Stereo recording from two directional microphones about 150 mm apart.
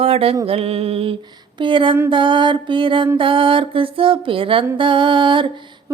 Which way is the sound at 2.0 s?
35° right (ahead or behind).